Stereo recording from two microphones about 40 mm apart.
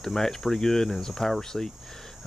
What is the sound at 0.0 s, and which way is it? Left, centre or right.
Speech, centre.